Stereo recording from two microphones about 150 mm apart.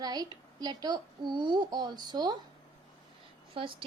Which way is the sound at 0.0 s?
25° right (ahead or behind).